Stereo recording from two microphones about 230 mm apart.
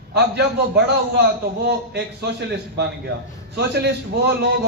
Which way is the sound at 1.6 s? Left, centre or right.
Right.